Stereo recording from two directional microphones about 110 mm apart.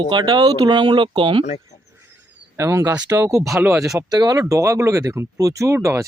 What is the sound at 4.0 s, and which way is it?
Speech, 35° right (ahead or behind).